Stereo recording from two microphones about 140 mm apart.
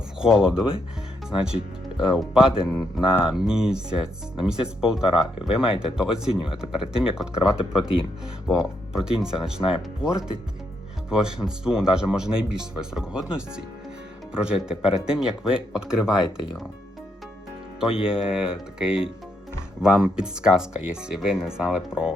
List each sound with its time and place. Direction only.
0.2 s speech: 5° right (ahead or behind)
7.8 s speech: 40° left (ahead or behind)
8.4 s speech: centre (ahead or behind)
17.7 s speech: 5° right (ahead or behind)